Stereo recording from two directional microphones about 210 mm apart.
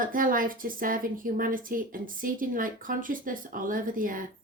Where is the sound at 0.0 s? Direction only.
40° right (ahead or behind).